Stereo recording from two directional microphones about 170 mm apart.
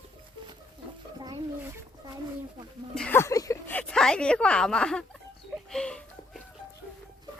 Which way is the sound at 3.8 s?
5° left (ahead or behind).